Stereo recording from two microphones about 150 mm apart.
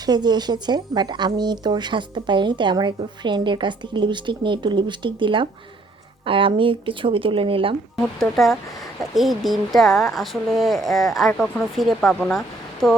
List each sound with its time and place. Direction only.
0.0 s speech: 30° right (ahead or behind)
8.2 s speech: centre (ahead or behind)